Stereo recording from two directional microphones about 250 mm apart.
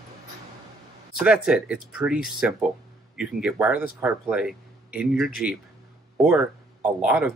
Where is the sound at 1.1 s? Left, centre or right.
Centre.